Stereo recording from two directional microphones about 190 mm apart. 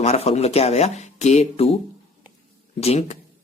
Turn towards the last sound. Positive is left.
turn(degrees=35)  # may be behind; listen again after turning